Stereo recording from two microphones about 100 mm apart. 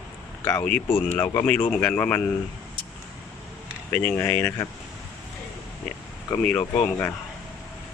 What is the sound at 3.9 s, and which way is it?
Speech, 15° left (ahead or behind).